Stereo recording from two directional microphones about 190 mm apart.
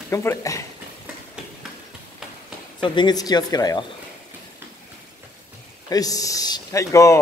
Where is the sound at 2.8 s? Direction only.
25° left (ahead or behind).